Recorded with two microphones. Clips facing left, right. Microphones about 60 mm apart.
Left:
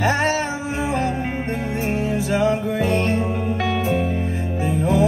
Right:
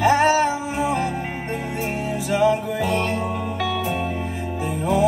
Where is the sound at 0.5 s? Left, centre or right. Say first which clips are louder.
Right 1 dB; left.